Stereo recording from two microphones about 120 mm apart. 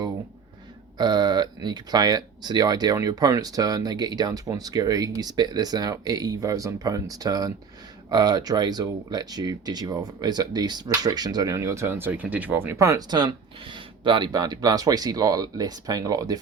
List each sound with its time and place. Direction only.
0.9 s speech: 35° right (ahead or behind)